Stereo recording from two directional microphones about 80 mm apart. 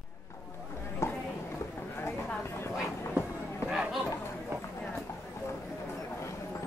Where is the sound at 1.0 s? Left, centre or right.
Left.